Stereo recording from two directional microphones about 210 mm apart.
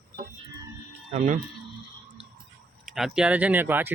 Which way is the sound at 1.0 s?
35° right (ahead or behind).